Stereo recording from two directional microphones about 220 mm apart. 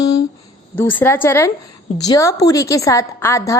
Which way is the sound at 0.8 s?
10° left (ahead or behind).